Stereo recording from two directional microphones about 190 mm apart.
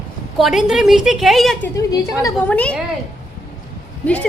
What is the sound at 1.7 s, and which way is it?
A woman's voice, 20° left (ahead or behind).